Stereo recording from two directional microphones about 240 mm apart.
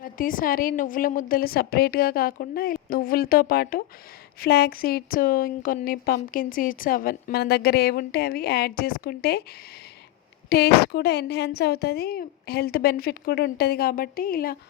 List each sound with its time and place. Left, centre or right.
0.0 s speech: left
10.5 s speech: left